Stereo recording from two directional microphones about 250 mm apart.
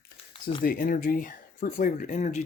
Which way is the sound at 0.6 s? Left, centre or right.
Left.